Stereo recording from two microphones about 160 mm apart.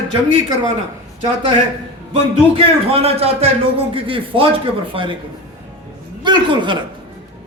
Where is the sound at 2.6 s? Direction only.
40° right (ahead or behind).